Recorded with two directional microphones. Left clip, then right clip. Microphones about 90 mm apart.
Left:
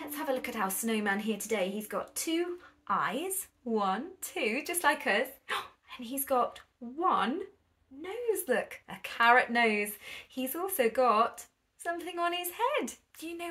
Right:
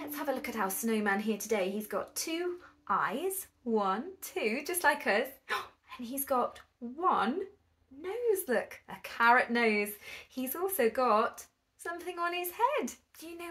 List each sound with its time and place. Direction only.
0.1 s speech: 25° left (ahead or behind)